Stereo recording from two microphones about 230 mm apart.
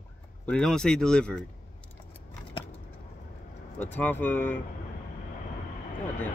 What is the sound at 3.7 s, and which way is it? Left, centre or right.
Speech, centre.